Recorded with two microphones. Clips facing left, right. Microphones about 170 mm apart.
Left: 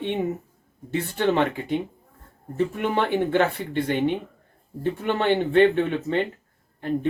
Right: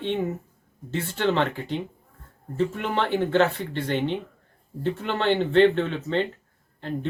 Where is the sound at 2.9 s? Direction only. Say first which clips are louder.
Even; 15° left (ahead or behind).